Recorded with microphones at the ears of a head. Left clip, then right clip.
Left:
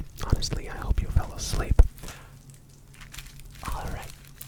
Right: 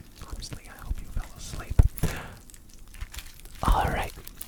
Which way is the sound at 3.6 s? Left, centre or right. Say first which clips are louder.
Right 11 dB; right.